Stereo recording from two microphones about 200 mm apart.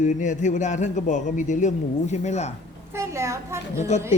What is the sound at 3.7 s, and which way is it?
Speech, 35° left (ahead or behind).